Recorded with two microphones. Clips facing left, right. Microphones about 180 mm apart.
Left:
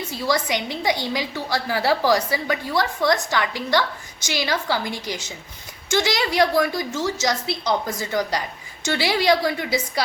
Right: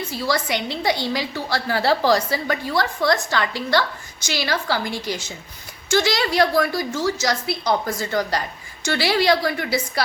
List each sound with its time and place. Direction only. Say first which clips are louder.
0.1 s a woman's voice: left 1 dB; 15° left (ahead or behind)